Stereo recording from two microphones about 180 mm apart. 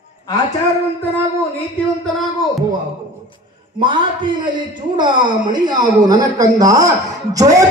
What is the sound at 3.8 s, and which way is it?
Speech, 25° right (ahead or behind).